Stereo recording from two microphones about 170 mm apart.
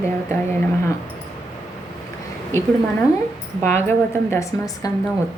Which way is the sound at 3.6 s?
15° left (ahead or behind).